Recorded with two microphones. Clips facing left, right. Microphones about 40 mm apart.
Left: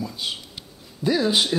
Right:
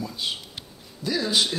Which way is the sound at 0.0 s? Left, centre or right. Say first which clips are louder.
Left 1 dB; centre.